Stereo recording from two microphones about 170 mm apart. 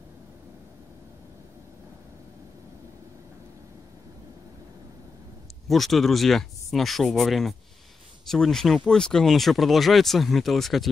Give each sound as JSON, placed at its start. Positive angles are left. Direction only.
{"t": 5.7, "sound": "speech", "side_deg": 0}